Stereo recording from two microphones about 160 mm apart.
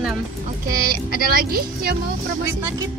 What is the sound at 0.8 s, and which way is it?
Speech, 70° right (ahead or behind).